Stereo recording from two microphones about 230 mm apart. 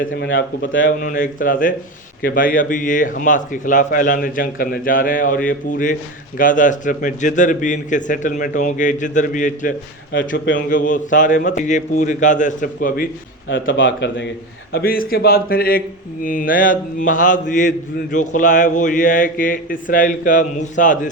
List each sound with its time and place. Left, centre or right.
0.1 s speech: left
1.0 s mantra: left
10.1 s speech: left
10.7 s mantra: left
13.5 s mantra: left